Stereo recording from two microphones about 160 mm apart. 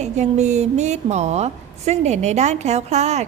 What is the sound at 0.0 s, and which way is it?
A woman's voice, 45° right (ahead or behind).